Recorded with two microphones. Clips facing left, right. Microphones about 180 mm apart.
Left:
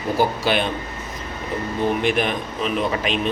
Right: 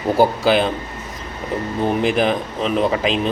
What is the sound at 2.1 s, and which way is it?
Speech, 35° right (ahead or behind).